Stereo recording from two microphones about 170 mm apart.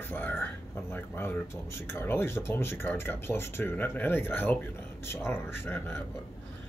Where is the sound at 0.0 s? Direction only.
10° left (ahead or behind).